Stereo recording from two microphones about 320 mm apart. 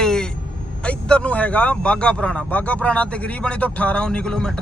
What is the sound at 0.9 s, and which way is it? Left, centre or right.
Speech, centre.